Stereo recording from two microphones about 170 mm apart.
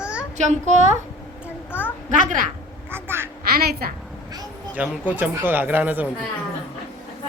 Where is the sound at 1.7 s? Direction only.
10° right (ahead or behind).